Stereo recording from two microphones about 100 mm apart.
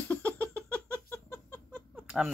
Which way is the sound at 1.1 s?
25° left (ahead or behind).